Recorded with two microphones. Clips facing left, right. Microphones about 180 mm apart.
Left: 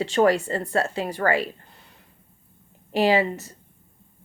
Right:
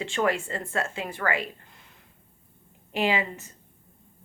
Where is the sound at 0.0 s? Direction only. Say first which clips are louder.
Left 7 dB; 35° left (ahead or behind).